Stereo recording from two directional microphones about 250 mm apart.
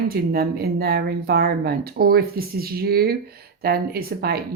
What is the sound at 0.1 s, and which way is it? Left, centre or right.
Speech, right.